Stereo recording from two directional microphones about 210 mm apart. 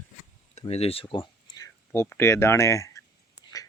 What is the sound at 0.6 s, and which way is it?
Speech, 30° left (ahead or behind).